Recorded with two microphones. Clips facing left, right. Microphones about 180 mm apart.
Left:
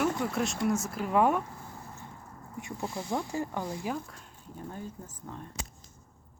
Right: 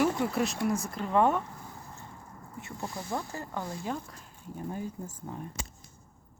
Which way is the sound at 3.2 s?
15° left (ahead or behind).